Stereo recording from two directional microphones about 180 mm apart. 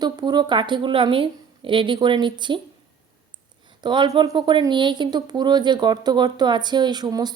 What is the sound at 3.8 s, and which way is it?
A woman's voice, 25° right (ahead or behind).